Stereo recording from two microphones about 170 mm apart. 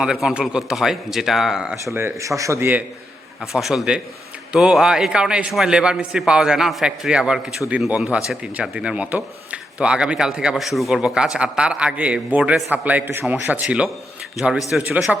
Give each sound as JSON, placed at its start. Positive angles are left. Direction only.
{"t": 0.0, "sound": "a man's voice", "side_deg": -5}
{"t": 1.8, "sound": "a man's voice", "side_deg": -15}